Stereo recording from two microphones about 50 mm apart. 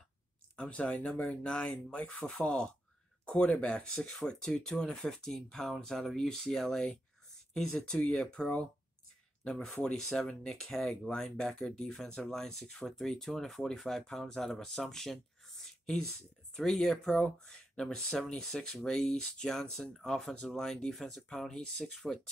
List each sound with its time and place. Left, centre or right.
0.6 s speech: left